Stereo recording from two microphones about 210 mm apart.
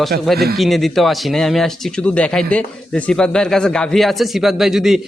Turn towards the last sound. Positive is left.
turn(degrees=0)  # may be behind; listen again after turning